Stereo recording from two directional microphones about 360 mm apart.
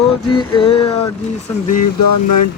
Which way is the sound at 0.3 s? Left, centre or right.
Centre.